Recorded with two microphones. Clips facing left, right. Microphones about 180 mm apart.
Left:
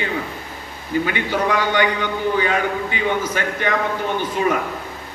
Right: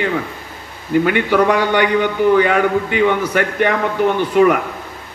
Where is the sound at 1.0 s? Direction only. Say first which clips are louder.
Right 8 dB; 60° right (ahead or behind).